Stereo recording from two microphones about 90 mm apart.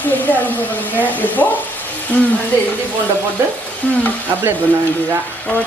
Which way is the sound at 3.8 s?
15° left (ahead or behind).